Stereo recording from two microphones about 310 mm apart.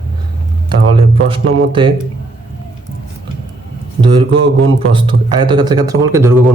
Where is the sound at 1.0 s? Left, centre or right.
Centre.